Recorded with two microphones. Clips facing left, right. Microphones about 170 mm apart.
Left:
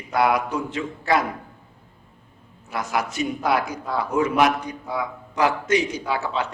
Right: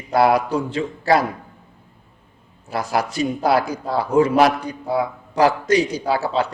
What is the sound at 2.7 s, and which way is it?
A man's voice, 35° right (ahead or behind).